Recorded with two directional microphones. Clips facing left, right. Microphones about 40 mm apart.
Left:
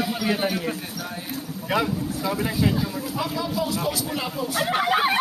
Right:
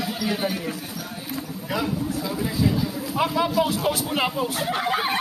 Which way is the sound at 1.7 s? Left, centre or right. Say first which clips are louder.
Left 2 dB; left.